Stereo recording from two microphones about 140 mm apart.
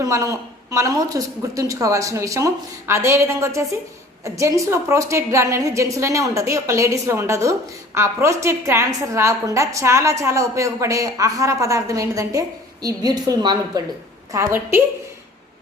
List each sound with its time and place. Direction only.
0.0 s a woman's voice: 25° right (ahead or behind)
14.3 s a woman's voice: 20° right (ahead or behind)